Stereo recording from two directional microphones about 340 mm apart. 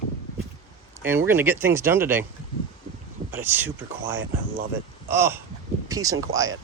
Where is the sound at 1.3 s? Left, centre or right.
Centre.